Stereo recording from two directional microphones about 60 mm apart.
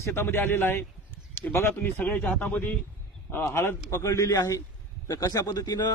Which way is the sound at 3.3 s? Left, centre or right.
Left.